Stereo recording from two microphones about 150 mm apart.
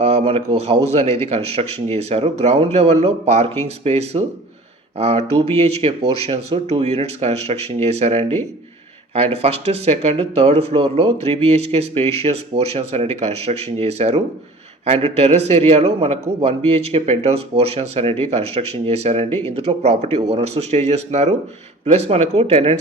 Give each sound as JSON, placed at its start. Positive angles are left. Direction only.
{"t": 0.0, "sound": "a man's voice", "side_deg": -40}
{"t": 19.3, "sound": "speech", "side_deg": 15}
{"t": 19.5, "sound": "speech", "side_deg": -45}